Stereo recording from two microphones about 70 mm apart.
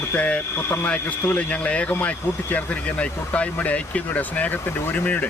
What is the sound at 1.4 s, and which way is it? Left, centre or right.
Speech, centre.